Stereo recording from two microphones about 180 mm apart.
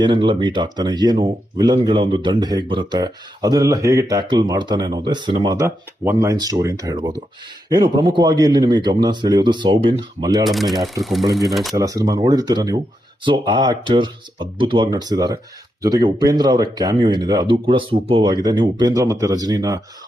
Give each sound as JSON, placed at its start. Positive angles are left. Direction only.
{"t": 0.0, "sound": "speech", "side_deg": -25}
{"t": 10.4, "sound": "speech", "side_deg": 0}
{"t": 11.7, "sound": "speech", "side_deg": -20}